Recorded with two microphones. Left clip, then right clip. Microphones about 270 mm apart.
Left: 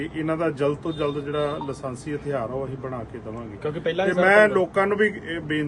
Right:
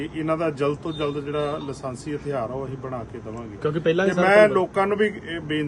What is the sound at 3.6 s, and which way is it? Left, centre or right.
Speech, right.